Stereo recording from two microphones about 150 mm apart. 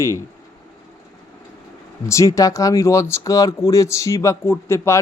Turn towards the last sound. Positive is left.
turn(degrees=15)  # may be behind; listen again after turning